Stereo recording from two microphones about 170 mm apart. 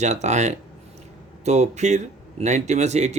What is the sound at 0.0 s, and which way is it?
Speech, 40° right (ahead or behind).